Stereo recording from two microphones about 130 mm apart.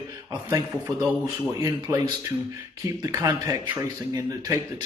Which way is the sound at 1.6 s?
25° right (ahead or behind).